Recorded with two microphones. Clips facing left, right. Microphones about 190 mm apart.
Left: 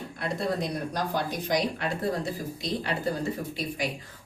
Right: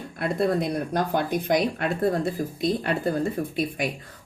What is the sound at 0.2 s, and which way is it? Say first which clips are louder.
Speech: right 6 dB; 55° right (ahead or behind).